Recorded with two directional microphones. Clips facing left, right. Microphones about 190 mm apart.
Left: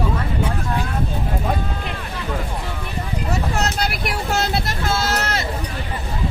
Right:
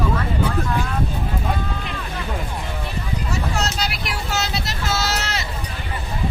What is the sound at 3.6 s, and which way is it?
Vehicle, 55° left (ahead or behind).